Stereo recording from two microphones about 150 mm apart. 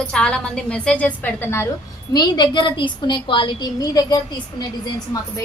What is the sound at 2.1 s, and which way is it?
A woman's voice, 30° left (ahead or behind).